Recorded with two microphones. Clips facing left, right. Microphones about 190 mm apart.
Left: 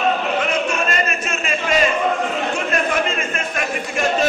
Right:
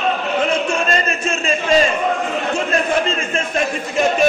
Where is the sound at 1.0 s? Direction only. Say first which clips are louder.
Right 4 dB; 30° right (ahead or behind).